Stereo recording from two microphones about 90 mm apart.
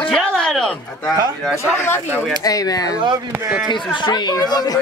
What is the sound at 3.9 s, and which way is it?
Speech, 60° left (ahead or behind).